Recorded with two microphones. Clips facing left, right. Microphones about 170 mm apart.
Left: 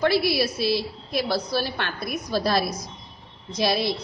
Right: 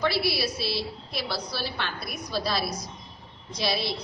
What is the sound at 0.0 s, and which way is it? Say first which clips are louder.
A woman's voice: left 5 dB; 50° left (ahead or behind).